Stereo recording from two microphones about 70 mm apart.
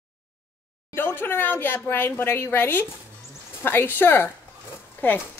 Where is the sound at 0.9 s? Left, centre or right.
Left.